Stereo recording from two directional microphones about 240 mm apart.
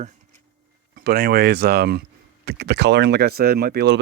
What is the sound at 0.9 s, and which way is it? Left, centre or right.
Speech, right.